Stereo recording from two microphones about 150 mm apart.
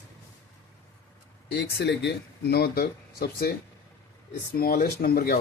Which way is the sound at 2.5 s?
90° left.